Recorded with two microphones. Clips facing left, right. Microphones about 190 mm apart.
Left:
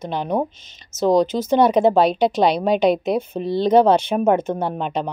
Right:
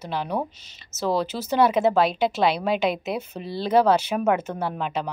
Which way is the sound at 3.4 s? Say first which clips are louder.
Left 5 dB; 30° left (ahead or behind).